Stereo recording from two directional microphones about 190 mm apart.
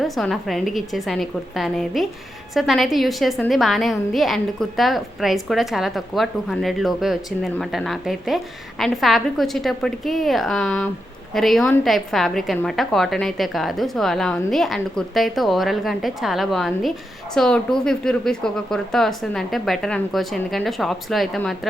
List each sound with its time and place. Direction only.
0.0 s a woman's voice: centre (ahead or behind)